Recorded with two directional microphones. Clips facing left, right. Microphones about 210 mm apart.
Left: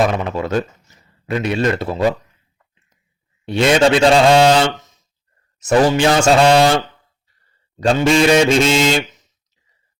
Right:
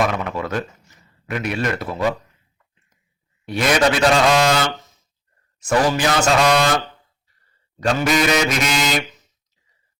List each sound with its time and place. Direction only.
0.2 s a man's voice: 25° left (ahead or behind)
3.4 s a man's voice: 25° left (ahead or behind)